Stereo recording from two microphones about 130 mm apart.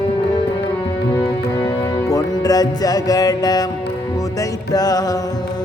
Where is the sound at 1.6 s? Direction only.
30° left (ahead or behind).